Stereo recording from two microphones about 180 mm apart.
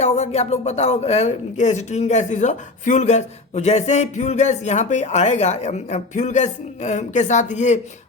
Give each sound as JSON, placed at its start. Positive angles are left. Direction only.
{"t": 0.0, "sound": "speech", "side_deg": 40}